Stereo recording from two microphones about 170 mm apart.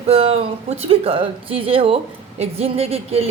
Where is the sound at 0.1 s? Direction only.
35° right (ahead or behind).